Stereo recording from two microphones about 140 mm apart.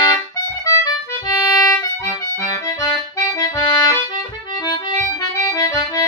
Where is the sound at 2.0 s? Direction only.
20° left (ahead or behind).